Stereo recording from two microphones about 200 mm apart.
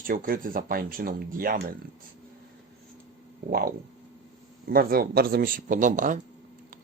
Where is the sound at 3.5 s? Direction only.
50° right (ahead or behind).